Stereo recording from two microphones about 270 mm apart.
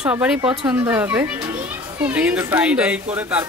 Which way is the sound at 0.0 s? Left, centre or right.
Centre.